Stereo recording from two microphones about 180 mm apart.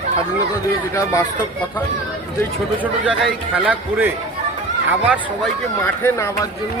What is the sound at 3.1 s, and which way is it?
A man's voice, 5° right (ahead or behind).